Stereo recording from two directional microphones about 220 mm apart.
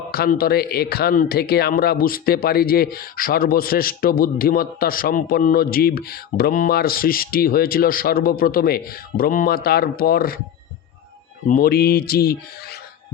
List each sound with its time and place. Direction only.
0.1 s a man's voice: 45° left (ahead or behind)
11.4 s a man's voice: 40° left (ahead or behind)